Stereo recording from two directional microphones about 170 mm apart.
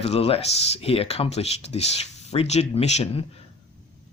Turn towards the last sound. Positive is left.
turn(degrees=35)  # may be behind; listen again after turning